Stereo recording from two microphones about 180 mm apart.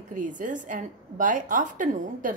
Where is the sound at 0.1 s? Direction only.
45° right (ahead or behind).